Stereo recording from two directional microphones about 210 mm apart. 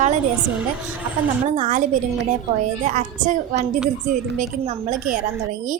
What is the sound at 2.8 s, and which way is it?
A woman's voice, 35° right (ahead or behind).